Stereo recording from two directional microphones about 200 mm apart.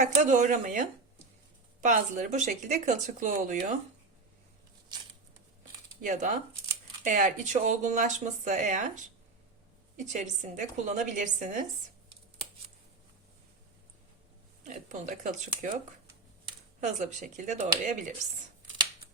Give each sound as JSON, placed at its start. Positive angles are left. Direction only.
{"t": 0.0, "sound": "speech", "side_deg": -35}
{"t": 6.0, "sound": "speech", "side_deg": -40}
{"t": 14.6, "sound": "speech", "side_deg": -35}
{"t": 16.8, "sound": "speech", "side_deg": -35}